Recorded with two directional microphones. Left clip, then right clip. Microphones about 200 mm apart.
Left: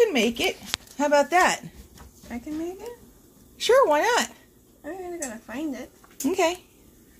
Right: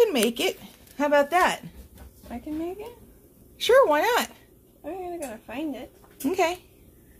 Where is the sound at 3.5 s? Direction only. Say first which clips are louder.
Even; 10° left (ahead or behind).